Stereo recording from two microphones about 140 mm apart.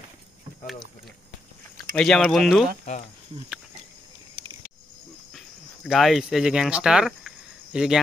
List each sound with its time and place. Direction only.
2.0 s speech: 5° left (ahead or behind)
2.9 s speech: 50° left (ahead or behind)
5.9 s speech: centre (ahead or behind)